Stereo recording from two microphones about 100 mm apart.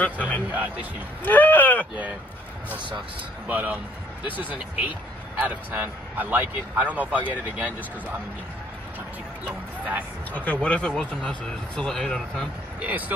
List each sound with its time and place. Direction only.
0.0 s speech: 15° left (ahead or behind)
0.5 s a man's voice: 15° right (ahead or behind)
1.2 s speech: 15° left (ahead or behind)
3.4 s a man's voice: 15° right (ahead or behind)
10.3 s speech: 15° left (ahead or behind)